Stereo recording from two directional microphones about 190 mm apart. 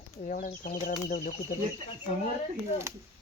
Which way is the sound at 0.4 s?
45° left (ahead or behind).